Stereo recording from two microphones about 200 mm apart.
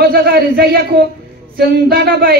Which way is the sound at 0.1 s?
50° right (ahead or behind).